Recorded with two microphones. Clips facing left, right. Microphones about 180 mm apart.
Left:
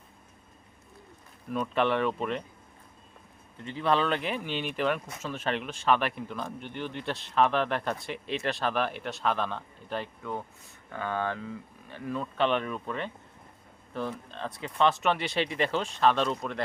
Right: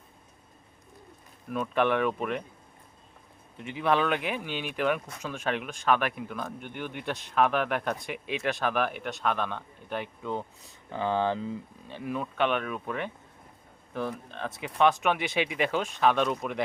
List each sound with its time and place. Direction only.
1.5 s speech: 5° right (ahead or behind)
3.6 s speech: 15° right (ahead or behind)
10.8 s speech: 25° right (ahead or behind)
12.4 s speech: 5° right (ahead or behind)